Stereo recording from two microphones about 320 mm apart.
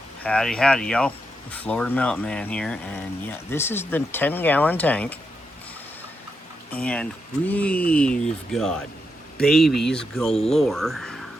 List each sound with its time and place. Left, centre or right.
0.2 s speech: centre
6.7 s speech: centre